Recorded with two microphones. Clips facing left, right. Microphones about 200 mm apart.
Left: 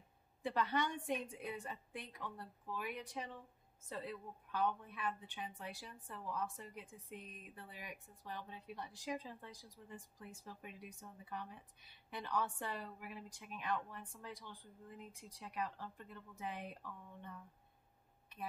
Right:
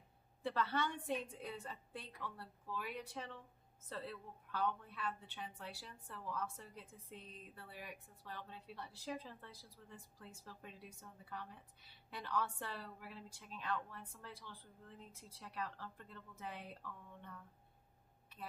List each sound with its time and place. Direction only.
0.4 s a woman's voice: 15° left (ahead or behind)